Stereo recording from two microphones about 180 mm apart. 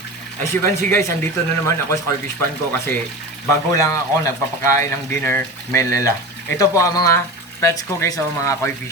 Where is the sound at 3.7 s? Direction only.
15° left (ahead or behind).